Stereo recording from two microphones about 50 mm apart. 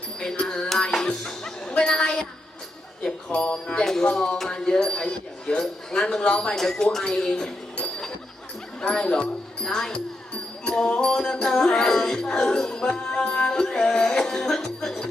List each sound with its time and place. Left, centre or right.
0.2 s music: centre
3.2 s speech: centre
4.0 s music: centre
7.8 s a sound: centre
8.8 s speech: centre
9.6 s music: centre